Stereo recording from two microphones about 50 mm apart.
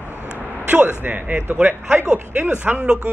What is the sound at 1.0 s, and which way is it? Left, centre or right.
A man's voice, right.